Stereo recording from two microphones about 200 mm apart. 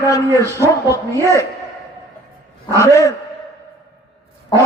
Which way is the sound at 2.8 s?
15° left (ahead or behind).